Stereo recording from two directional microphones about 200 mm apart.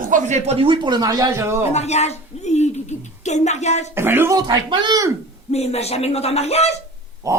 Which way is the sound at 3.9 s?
10° right (ahead or behind).